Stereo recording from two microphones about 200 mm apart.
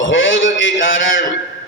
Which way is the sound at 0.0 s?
70° left (ahead or behind).